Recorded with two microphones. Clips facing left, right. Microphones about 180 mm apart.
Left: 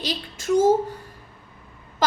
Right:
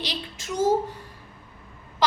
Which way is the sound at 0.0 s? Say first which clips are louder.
Left 4 dB; 50° left (ahead or behind).